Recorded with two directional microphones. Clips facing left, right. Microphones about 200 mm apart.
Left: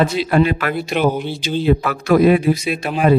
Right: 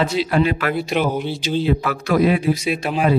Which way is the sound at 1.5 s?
55° left (ahead or behind).